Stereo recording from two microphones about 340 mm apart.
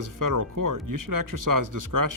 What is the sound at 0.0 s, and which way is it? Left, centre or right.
Speech, right.